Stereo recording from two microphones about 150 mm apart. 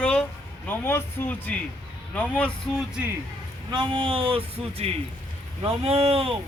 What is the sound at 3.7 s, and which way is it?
Speech, 35° right (ahead or behind).